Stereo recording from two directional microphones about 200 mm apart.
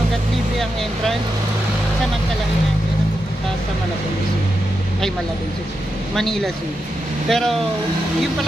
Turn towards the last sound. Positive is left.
turn(degrees=0)  # may be behind; listen again after turning